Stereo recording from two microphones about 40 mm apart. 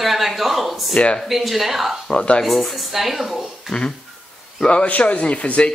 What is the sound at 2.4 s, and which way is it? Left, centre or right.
A woman's voice, centre.